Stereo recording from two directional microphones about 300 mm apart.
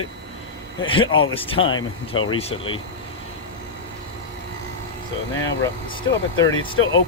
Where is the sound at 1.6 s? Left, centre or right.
Left.